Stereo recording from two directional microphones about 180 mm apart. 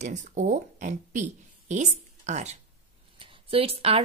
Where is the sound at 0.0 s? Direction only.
45° right (ahead or behind).